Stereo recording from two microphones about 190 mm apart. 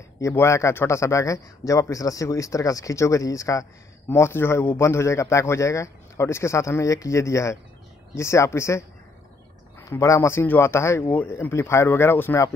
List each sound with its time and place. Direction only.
0.2 s a man's voice: 15° left (ahead or behind)